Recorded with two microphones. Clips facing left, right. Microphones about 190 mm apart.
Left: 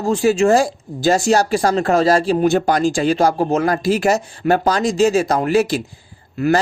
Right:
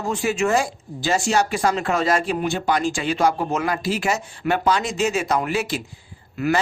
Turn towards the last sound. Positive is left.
turn(degrees=35)  # may be behind; listen again after turning